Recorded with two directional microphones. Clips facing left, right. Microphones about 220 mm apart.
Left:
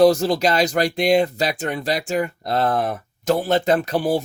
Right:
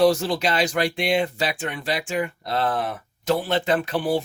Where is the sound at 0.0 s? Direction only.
40° left (ahead or behind).